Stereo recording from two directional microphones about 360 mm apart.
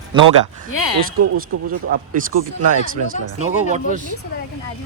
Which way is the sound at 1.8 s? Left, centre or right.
Right.